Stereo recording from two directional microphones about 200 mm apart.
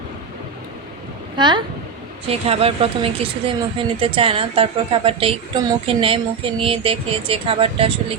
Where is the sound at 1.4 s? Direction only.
20° right (ahead or behind).